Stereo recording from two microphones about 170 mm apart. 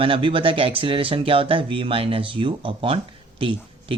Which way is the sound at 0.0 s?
30° right (ahead or behind).